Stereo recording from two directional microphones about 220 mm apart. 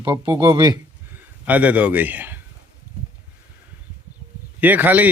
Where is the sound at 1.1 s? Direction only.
5° right (ahead or behind).